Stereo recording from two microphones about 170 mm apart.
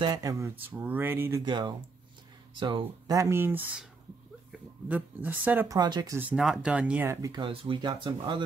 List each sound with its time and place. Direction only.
0.0 s speech: 20° right (ahead or behind)
1.4 s speech: 25° right (ahead or behind)
5.8 s speech: 25° right (ahead or behind)
6.1 s speech: 5° right (ahead or behind)
7.4 s speech: 30° right (ahead or behind)